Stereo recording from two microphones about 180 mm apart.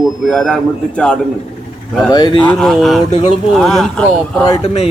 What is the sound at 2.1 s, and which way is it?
Speech, 25° left (ahead or behind).